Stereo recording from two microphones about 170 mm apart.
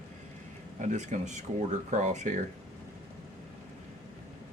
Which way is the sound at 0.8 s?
45° right (ahead or behind).